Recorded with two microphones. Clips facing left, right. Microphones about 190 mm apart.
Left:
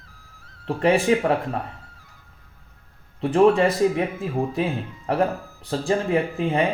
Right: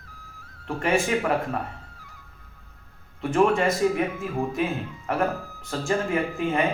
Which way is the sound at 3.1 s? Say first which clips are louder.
Left 4 dB; 35° left (ahead or behind).